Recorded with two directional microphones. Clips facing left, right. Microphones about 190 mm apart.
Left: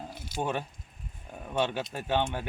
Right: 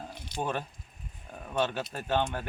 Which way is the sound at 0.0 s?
5° left (ahead or behind).